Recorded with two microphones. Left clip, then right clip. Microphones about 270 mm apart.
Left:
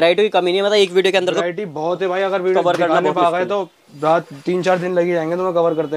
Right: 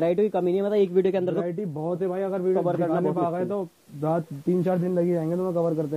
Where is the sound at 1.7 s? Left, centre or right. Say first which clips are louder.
Left 9 dB; left.